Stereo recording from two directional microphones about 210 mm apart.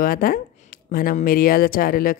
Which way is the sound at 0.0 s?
45° left (ahead or behind).